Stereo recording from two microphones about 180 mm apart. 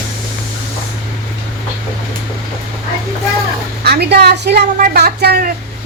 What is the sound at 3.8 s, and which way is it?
A woman's voice, 65° right (ahead or behind).